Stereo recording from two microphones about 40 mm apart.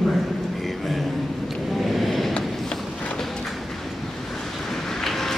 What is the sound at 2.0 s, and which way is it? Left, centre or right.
Vehicle, centre.